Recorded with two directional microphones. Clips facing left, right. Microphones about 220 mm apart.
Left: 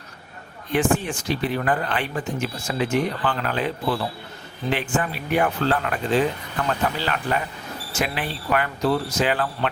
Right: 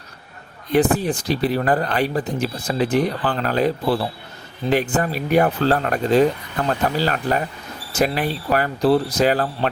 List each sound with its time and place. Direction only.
0.7 s speech: 35° right (ahead or behind)